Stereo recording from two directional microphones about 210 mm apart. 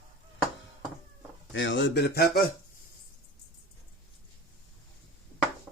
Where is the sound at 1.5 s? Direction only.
60° left (ahead or behind).